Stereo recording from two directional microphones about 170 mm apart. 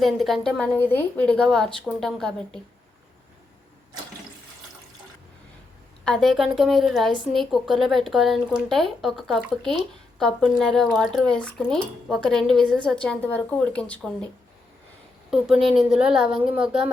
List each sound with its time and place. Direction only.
0.0 s speech: centre (ahead or behind)
6.1 s speech: 5° left (ahead or behind)
15.3 s speech: 5° right (ahead or behind)